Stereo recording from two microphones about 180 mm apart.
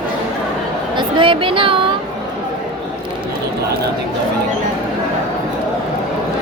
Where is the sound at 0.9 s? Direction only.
30° right (ahead or behind).